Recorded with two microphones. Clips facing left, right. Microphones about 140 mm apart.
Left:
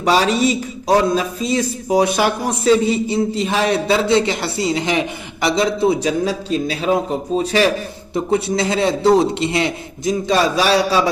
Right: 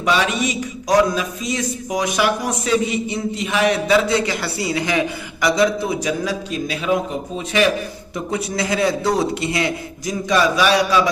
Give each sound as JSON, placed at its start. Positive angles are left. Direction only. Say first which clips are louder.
{"t": 0.0, "sound": "a man's voice", "louder": "left 4 dB", "side_deg": 35}